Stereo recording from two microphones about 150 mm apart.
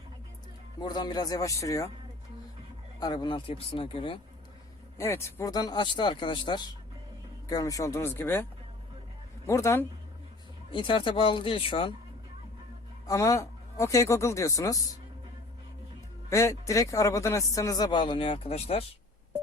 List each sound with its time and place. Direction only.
0.8 s a man's voice: 30° left (ahead or behind)
3.0 s speech: 25° left (ahead or behind)
4.9 s a man's voice: 15° left (ahead or behind)
9.5 s a man's voice: 20° left (ahead or behind)
10.7 s speech: 35° left (ahead or behind)
13.1 s a man's voice: 20° left (ahead or behind)
16.3 s a man's voice: 20° left (ahead or behind); by 18.9 s 40° left (ahead or behind)